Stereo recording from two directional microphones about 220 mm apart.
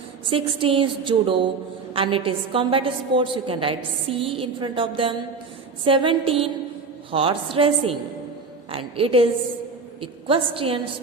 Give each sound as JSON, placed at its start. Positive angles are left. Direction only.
{"t": 0.3, "sound": "a woman's voice", "side_deg": -25}